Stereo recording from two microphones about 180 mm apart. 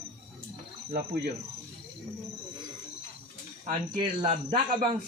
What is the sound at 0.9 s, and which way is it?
Speech, 60° right (ahead or behind).